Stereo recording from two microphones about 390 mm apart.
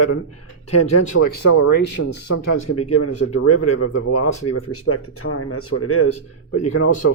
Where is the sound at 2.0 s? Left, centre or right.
Left.